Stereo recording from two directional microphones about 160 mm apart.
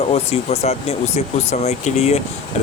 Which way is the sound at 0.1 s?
40° left (ahead or behind).